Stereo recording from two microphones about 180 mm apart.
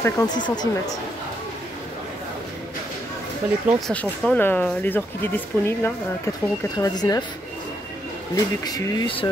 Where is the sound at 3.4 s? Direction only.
5° right (ahead or behind).